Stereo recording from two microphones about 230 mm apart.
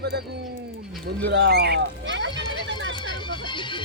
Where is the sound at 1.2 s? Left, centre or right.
Right.